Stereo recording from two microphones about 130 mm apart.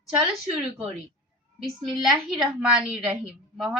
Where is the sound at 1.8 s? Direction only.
Centre (ahead or behind).